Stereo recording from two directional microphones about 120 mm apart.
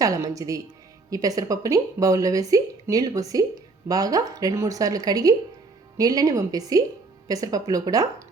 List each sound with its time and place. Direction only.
0.0 s a woman's voice: 30° right (ahead or behind)